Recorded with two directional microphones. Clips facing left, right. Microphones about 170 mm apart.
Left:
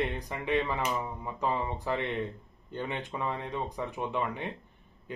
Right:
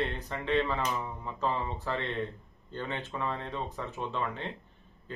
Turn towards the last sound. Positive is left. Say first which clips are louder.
# left 2 dB
turn(degrees=15)  # may be behind; listen again after turning